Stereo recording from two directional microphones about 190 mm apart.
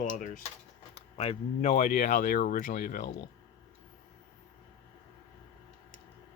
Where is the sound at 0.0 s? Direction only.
45° left (ahead or behind).